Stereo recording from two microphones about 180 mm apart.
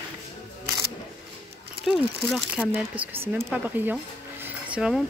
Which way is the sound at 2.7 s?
10° right (ahead or behind).